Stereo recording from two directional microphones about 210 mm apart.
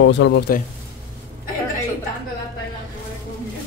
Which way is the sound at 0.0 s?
60° left (ahead or behind).